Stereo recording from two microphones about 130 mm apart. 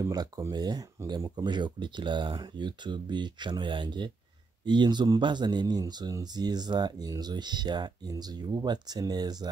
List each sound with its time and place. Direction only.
0.0 s speech: 25° right (ahead or behind)